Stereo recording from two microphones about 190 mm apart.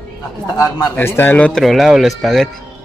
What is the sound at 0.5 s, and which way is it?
Speech, 15° left (ahead or behind).